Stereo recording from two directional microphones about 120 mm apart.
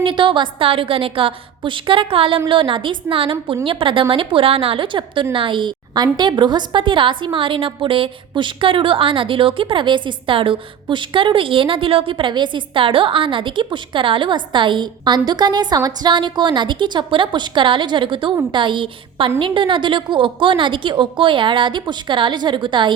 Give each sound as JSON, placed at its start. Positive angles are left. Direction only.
{"t": 0.0, "sound": "a woman's voice", "side_deg": -45}